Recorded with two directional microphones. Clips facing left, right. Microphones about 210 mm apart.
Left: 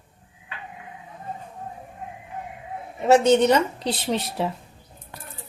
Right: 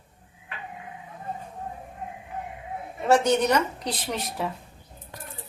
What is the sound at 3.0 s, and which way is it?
A woman's voice, 25° left (ahead or behind).